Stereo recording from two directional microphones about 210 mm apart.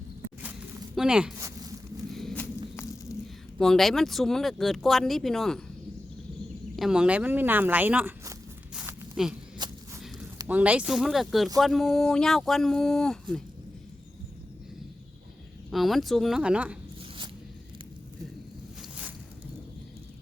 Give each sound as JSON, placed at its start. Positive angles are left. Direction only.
{"t": 0.9, "sound": "speech", "side_deg": -5}
{"t": 1.4, "sound": "a sound", "side_deg": -15}
{"t": 2.1, "sound": "walk", "side_deg": 5}
{"t": 3.6, "sound": "speech", "side_deg": 0}
{"t": 6.7, "sound": "speech", "side_deg": -5}
{"t": 8.7, "sound": "zipper", "side_deg": -10}
{"t": 9.6, "sound": "a sound", "side_deg": -20}
{"t": 10.3, "sound": "speech", "side_deg": -5}
{"t": 15.7, "sound": "speech", "side_deg": 0}
{"t": 18.8, "sound": "a sound", "side_deg": -5}